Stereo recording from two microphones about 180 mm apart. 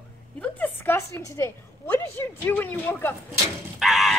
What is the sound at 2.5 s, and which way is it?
Speech, 10° left (ahead or behind).